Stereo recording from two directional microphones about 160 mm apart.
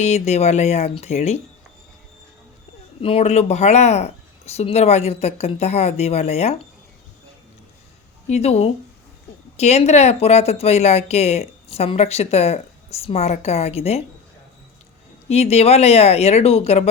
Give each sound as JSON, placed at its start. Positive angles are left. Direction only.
{"t": 0.0, "sound": "speech", "side_deg": 45}
{"t": 3.0, "sound": "a woman's voice", "side_deg": 35}
{"t": 8.3, "sound": "a woman's voice", "side_deg": 40}
{"t": 15.3, "sound": "a woman's voice", "side_deg": 40}